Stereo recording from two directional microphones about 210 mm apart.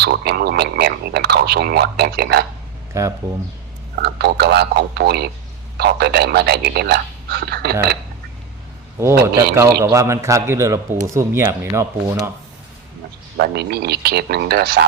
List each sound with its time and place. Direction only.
0.0 s speech: 50° right (ahead or behind)
2.9 s speech: 15° right (ahead or behind)
4.0 s speech: 50° right (ahead or behind)
9.2 s speech: 15° right (ahead or behind)
13.3 s speech: 50° right (ahead or behind)